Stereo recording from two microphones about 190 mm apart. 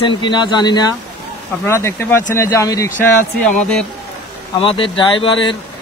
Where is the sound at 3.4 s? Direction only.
5° left (ahead or behind).